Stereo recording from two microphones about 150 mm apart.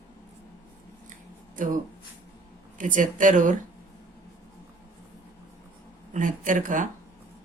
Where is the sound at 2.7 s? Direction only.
60° right (ahead or behind).